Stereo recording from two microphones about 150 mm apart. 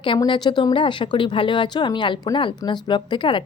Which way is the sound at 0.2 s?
30° left (ahead or behind).